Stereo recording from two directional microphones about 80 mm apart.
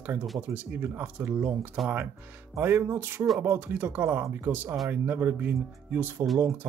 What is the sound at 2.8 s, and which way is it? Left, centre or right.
Speech, right.